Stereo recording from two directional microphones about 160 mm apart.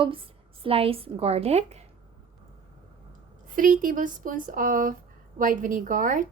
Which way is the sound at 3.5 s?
55° right (ahead or behind).